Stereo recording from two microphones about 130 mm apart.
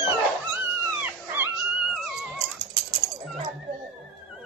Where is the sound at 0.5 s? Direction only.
15° right (ahead or behind).